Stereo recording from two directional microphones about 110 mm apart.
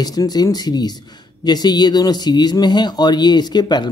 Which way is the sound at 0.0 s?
35° left (ahead or behind).